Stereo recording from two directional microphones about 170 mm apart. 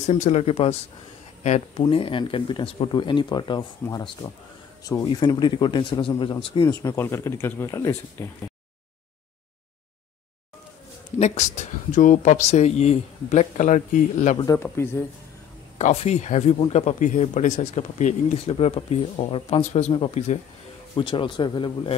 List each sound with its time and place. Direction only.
0.0 s speech: 40° left (ahead or behind)
6.8 s speech: 15° left (ahead or behind)
11.1 s speech: 45° left (ahead or behind)
14.4 s speech: 15° left (ahead or behind)
15.8 s speech: 40° left (ahead or behind)